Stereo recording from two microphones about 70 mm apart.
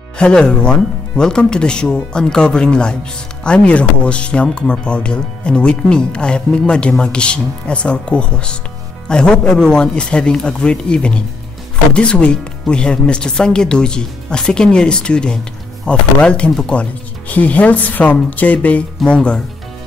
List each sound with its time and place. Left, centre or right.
0.2 s speech: centre